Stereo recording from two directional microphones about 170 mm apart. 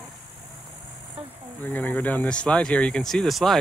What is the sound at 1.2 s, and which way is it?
Speech, 35° right (ahead or behind).